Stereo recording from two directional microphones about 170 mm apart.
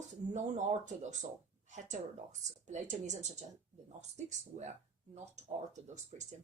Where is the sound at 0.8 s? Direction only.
45° right (ahead or behind).